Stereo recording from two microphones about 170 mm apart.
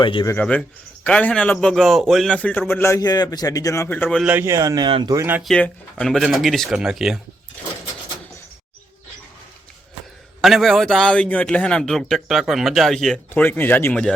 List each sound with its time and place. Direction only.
0.0 s speech: 30° left (ahead or behind)
0.3 s a man's voice: 10° left (ahead or behind)
3.8 s a man's voice: 10° left (ahead or behind)
4.2 s a man's voice: 10° right (ahead or behind); by 5.1 s 25° right (ahead or behind)
5.1 s speech: 15° right (ahead or behind)
5.4 s a man's voice: 5° left (ahead or behind)
10.4 s a man's voice: centre (ahead or behind)